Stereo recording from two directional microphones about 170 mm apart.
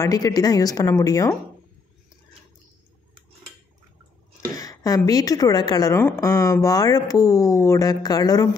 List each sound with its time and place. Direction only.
0.0 s a woman's voice: 20° left (ahead or behind)
4.6 s a woman's voice: 20° left (ahead or behind)